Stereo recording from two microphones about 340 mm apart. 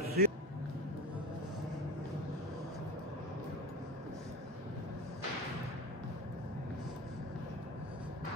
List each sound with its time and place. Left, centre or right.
0.2 s speech: right